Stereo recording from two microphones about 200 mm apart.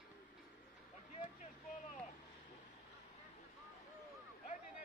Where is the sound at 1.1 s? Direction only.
35° left (ahead or behind).